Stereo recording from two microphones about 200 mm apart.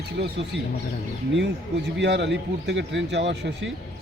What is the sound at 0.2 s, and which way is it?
Speech, 55° right (ahead or behind).